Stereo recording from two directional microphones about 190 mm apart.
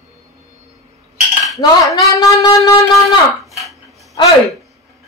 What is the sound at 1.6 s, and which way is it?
Speech, 15° left (ahead or behind).